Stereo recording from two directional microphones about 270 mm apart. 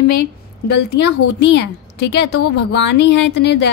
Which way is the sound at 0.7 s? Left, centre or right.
Left.